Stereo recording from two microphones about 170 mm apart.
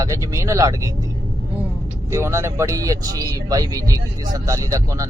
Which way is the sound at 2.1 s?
15° right (ahead or behind).